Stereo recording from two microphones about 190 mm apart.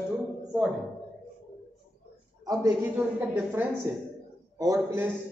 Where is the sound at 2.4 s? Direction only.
20° right (ahead or behind).